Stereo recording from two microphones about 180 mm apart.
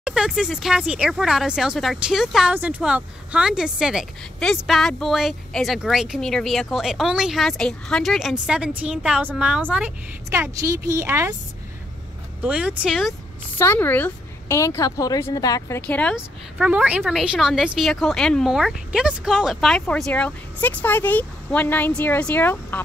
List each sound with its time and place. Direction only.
0.0 s a woman's voice: 5° right (ahead or behind)
12.4 s speech: 5° right (ahead or behind)
13.6 s a woman's voice: 10° left (ahead or behind)
15.9 s a woman's voice: 5° left (ahead or behind)
16.2 s speech: 5° right (ahead or behind); by 22.8 s 10° left (ahead or behind)